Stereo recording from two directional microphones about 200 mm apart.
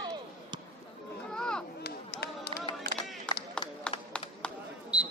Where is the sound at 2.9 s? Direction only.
Centre (ahead or behind).